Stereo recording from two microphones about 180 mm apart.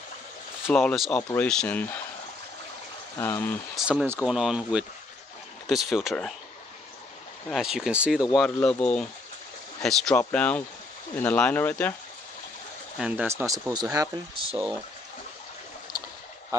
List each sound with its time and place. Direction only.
0.7 s speech: 5° left (ahead or behind)
3.2 s speech: 15° left (ahead or behind)
3.7 s speech: centre (ahead or behind)
7.4 s speech: centre (ahead or behind)
8.4 s speech: 10° left (ahead or behind)
12.9 s speech: 5° right (ahead or behind)